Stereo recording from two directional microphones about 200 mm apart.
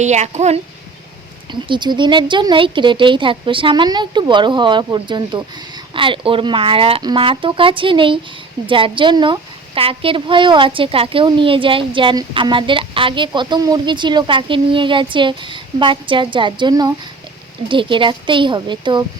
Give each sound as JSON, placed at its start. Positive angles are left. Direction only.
{"t": 0.0, "sound": "speech", "side_deg": -35}
{"t": 1.5, "sound": "speech", "side_deg": -25}